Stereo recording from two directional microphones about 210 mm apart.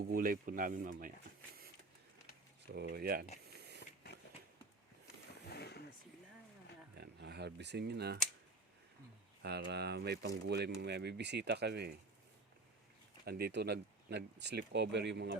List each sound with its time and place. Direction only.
0.0 s speech: 40° right (ahead or behind)
2.7 s speech: 50° right (ahead or behind)
5.5 s wild animals: 50° left (ahead or behind)
6.9 s speech: 50° right (ahead or behind)
9.4 s speech: 50° right (ahead or behind)
13.2 s speech: 50° right (ahead or behind)